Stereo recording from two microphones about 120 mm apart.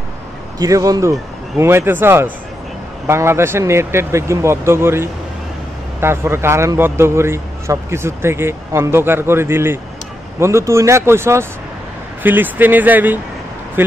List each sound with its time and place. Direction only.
0.6 s a man's voice: 30° right (ahead or behind)